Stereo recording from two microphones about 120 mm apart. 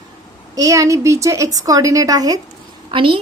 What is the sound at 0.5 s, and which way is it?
A woman's voice, 30° right (ahead or behind).